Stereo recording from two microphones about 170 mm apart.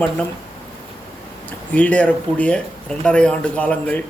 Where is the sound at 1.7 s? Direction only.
10° left (ahead or behind).